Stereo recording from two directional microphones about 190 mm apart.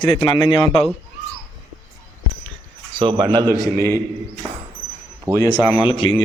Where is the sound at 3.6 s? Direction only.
15° left (ahead or behind).